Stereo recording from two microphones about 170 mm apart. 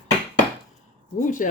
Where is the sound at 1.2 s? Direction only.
50° left (ahead or behind).